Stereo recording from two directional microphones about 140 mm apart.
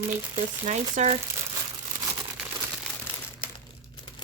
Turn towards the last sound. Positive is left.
turn(degrees=35)  # may be behind; listen again after turning